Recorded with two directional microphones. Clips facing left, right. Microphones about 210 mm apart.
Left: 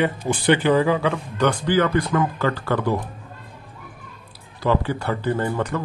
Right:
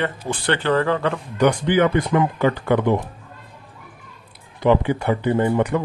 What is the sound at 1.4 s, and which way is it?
Speech, 15° right (ahead or behind).